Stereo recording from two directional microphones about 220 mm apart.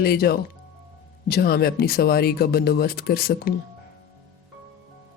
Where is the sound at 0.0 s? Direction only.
45° left (ahead or behind).